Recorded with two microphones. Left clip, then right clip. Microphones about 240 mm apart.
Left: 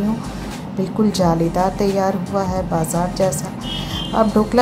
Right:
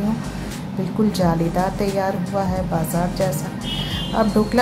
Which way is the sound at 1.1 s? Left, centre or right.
Left.